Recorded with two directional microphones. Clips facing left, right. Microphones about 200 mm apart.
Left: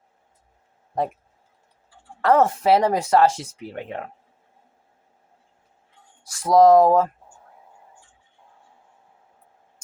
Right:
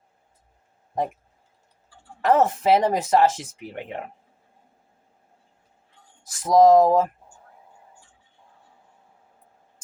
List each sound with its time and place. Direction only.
2.2 s speech: 20° right (ahead or behind)
6.3 s speech: 20° right (ahead or behind)